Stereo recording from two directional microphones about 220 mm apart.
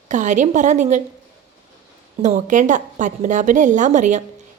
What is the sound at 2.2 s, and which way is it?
A woman's voice, 35° right (ahead or behind).